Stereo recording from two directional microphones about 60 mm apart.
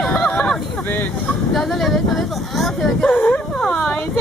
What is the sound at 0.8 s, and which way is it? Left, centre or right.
Speech, left.